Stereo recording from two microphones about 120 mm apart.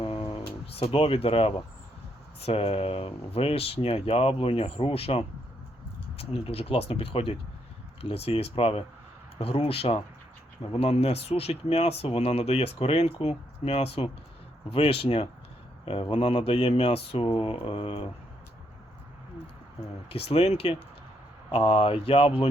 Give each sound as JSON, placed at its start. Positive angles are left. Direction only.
{"t": 0.0, "sound": "a sound", "side_deg": 50}
{"t": 2.4, "sound": "speech", "side_deg": 55}
{"t": 20.1, "sound": "speech", "side_deg": 55}
{"t": 21.5, "sound": "speech", "side_deg": 45}